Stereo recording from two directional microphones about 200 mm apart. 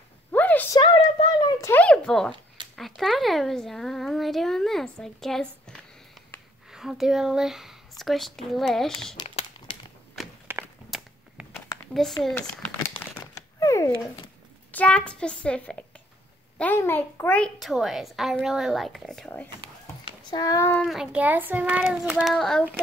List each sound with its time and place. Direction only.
0.3 s a sound: 10° left (ahead or behind)
0.7 s a sound: 20° left (ahead or behind)
1.7 s a sound: 5° left (ahead or behind)
2.7 s speech: centre (ahead or behind)
9.1 s crumpling: 30° left (ahead or behind)
10.1 s walk: centre (ahead or behind)
12.2 s speech: centre (ahead or behind)
12.8 s crumpling: 15° left (ahead or behind)
14.7 s speech: 5° left (ahead or behind)
20.1 s speech: 20° left (ahead or behind)
20.8 s speech: centre (ahead or behind)